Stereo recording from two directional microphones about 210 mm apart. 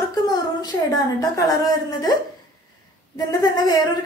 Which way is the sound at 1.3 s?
15° left (ahead or behind).